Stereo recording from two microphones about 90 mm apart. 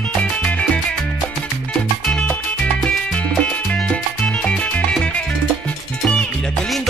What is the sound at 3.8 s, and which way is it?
Music, 10° left (ahead or behind).